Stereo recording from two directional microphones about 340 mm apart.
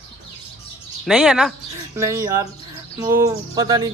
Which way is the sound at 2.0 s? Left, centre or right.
Centre.